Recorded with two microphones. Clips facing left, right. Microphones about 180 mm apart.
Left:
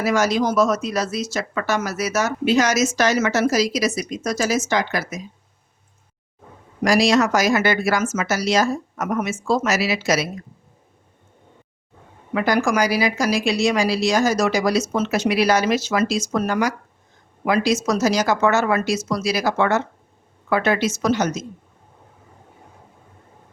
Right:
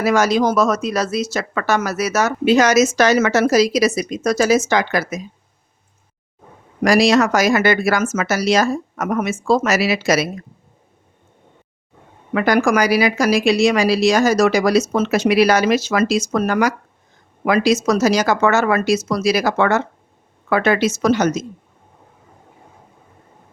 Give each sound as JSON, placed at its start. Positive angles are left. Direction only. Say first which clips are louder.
{"t": 0.0, "sound": "speech", "louder": "right 3 dB", "side_deg": -70}
{"t": 6.8, "sound": "speech", "louder": "right 3 dB", "side_deg": -60}
{"t": 12.3, "sound": "speech", "louder": "right 4 dB", "side_deg": -70}